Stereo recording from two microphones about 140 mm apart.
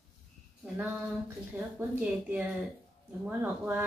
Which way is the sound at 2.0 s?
10° right (ahead or behind).